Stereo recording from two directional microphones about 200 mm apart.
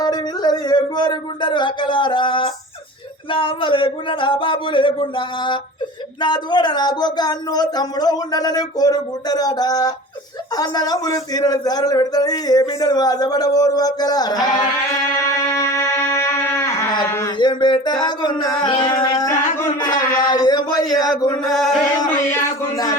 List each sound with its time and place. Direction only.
0.0 s music: 20° left (ahead or behind)
21.4 s chant: centre (ahead or behind)
21.9 s music: 20° left (ahead or behind)